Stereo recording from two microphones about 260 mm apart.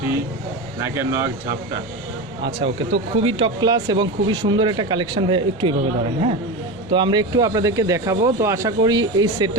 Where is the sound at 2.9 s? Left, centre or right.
Right.